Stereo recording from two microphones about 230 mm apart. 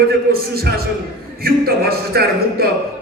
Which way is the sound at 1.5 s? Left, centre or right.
Right.